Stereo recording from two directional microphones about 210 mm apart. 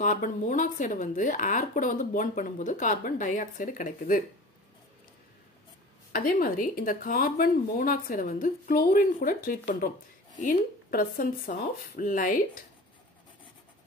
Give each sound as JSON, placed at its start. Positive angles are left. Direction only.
{"t": 0.0, "sound": "speech", "side_deg": 40}
{"t": 6.1, "sound": "speech", "side_deg": 40}